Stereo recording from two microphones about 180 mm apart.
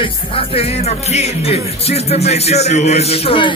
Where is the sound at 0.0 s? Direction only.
30° left (ahead or behind).